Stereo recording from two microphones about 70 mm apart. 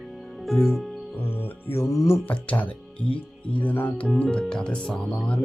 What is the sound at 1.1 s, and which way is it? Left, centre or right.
Music, left.